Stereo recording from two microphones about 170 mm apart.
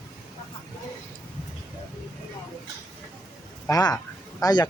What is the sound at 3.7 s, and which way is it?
Speech, 20° left (ahead or behind).